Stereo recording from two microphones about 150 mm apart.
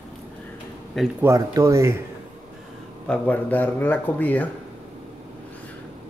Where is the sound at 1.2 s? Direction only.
20° right (ahead or behind).